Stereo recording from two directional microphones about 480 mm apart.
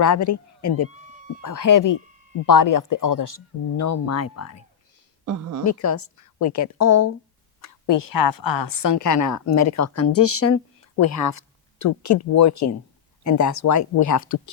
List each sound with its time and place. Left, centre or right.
0.0 s a woman's voice: left
5.2 s speech: right
5.6 s a woman's voice: left